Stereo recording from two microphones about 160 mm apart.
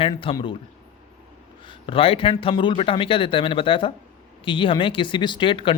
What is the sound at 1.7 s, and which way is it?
Speech, 35° left (ahead or behind).